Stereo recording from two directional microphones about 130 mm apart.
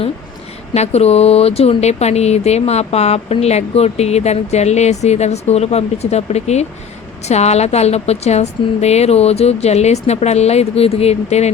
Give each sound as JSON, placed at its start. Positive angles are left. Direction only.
{"t": 0.7, "sound": "speech", "side_deg": 55}